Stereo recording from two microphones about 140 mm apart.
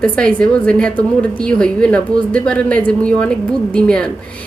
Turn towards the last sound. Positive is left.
turn(degrees=5)  # may be behind; listen again after turning